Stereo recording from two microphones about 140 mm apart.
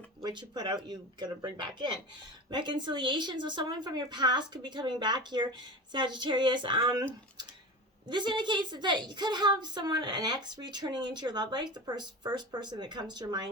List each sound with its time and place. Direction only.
0.2 s a woman's voice: 30° right (ahead or behind)
8.0 s a woman's voice: 35° right (ahead or behind)